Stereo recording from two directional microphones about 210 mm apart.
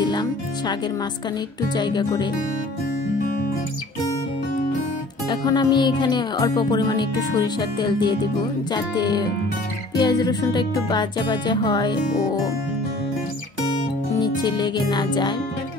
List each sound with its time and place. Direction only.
0.0 s speech: 20° left (ahead or behind)
1.8 s speech: 20° left (ahead or behind)
5.3 s speech: 20° left (ahead or behind)
14.2 s speech: 20° left (ahead or behind)